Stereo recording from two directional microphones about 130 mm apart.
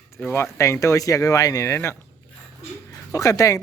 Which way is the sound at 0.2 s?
10° left (ahead or behind).